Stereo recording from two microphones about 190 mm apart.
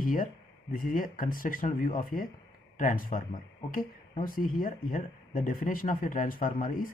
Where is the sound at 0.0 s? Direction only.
45° left (ahead or behind).